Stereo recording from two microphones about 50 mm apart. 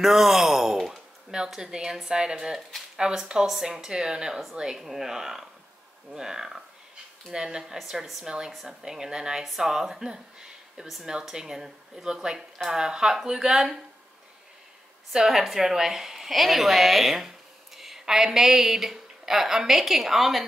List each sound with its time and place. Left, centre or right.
0.0 s speech: centre
15.1 s a woman's voice: centre